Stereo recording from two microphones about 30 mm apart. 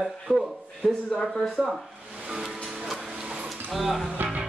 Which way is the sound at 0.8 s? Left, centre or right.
Centre.